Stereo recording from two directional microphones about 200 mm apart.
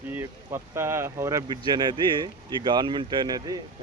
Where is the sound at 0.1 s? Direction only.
10° right (ahead or behind).